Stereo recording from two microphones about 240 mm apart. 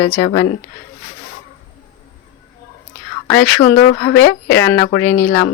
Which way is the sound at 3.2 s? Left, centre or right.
Centre.